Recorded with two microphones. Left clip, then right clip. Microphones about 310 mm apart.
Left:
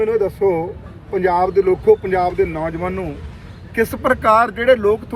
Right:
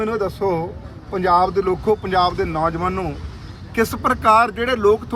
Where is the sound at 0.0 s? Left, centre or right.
Centre.